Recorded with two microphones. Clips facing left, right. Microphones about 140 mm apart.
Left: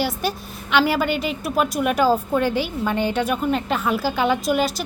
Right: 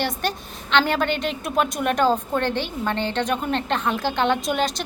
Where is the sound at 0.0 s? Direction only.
10° left (ahead or behind).